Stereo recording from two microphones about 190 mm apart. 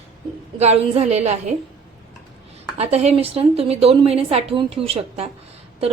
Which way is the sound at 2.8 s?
35° right (ahead or behind).